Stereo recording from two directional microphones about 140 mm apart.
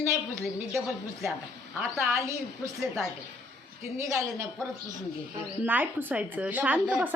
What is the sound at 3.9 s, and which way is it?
Speech, 20° right (ahead or behind).